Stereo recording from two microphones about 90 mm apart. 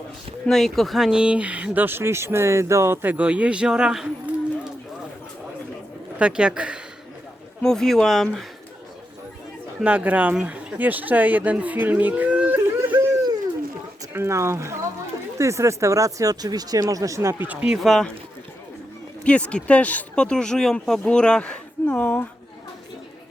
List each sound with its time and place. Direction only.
0.4 s speech: 5° left (ahead or behind)
6.1 s speech: 10° right (ahead or behind)
7.6 s speech: 5° left (ahead or behind)
9.8 s speech: 15° right (ahead or behind)
14.1 s speech: 30° right (ahead or behind)
17.4 s speech: 15° right (ahead or behind)
17.7 s speech: 5° left (ahead or behind)
19.2 s speech: 15° left (ahead or behind)